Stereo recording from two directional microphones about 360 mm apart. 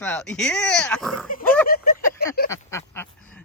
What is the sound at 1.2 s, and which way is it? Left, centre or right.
Speech, left.